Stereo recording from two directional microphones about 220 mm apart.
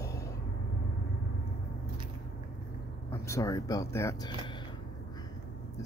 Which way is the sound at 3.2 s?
15° left (ahead or behind).